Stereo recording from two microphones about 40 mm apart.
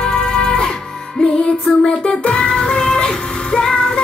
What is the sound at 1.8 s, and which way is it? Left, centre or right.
Music, left.